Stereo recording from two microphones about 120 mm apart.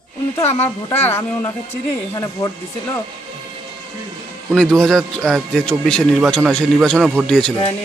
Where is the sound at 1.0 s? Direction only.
25° left (ahead or behind).